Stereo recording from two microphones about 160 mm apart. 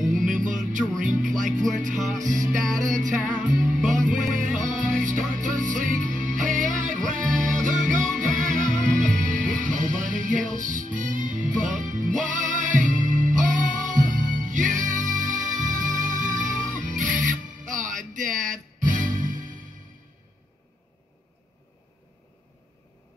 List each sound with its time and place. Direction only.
0.2 s music: 55° right (ahead or behind)